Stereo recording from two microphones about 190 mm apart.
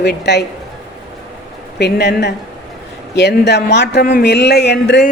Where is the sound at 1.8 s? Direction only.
60° left (ahead or behind).